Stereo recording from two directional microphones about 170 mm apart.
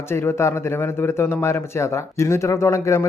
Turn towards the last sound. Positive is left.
turn(degrees=15)  # may be behind; listen again after turning